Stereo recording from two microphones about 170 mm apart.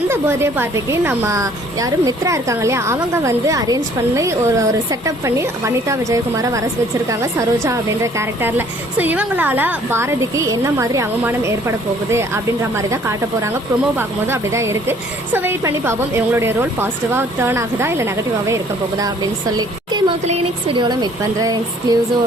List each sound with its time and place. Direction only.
0.1 s speech: 15° right (ahead or behind)
20.2 s speech: 35° right (ahead or behind)